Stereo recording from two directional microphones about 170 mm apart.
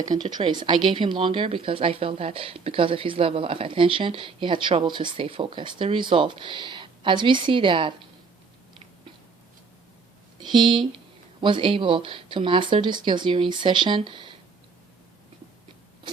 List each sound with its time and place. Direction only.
0.0 s speech: 25° right (ahead or behind)
10.4 s speech: 25° right (ahead or behind)